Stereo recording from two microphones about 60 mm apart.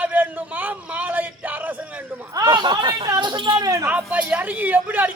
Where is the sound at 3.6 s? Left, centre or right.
Right.